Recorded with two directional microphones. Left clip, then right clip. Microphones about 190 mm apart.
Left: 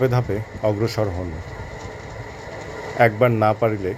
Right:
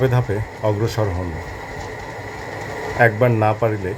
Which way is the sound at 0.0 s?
15° left (ahead or behind).